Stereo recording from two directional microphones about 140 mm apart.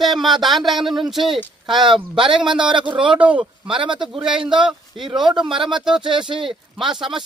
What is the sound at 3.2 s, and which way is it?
Speech, 10° right (ahead or behind).